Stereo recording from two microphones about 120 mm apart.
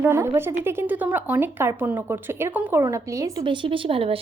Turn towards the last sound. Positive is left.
turn(degrees=-50)  # may be behind; listen again after turning